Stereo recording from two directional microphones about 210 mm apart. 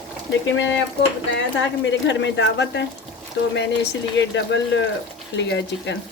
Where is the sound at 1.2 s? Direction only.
60° left (ahead or behind).